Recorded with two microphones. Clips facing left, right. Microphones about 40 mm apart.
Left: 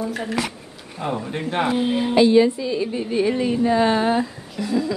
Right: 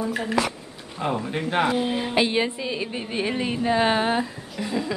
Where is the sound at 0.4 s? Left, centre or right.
Right.